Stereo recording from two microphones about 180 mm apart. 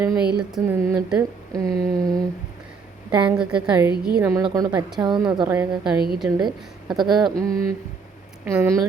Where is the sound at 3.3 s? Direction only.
5° right (ahead or behind).